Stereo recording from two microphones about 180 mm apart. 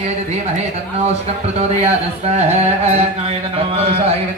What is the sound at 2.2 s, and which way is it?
Music, 35° right (ahead or behind).